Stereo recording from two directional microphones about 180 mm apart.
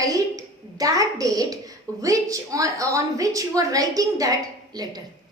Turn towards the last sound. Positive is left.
turn(degrees=-20)  # may be behind; listen again after turning